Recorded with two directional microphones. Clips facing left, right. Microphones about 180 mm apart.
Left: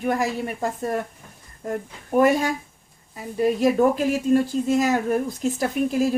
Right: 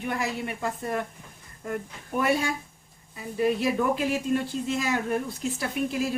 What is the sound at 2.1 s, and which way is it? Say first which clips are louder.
Speech: left 7 dB; 45° left (ahead or behind).